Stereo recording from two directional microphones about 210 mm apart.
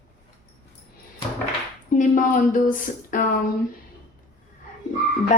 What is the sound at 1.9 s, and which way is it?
Speech, 40° left (ahead or behind).